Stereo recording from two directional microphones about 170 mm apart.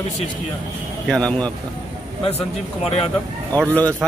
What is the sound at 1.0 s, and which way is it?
Speech, 5° left (ahead or behind).